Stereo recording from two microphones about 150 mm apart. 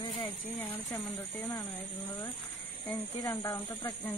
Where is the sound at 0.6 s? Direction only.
15° left (ahead or behind).